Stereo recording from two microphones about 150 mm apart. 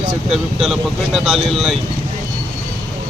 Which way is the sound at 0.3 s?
Centre (ahead or behind).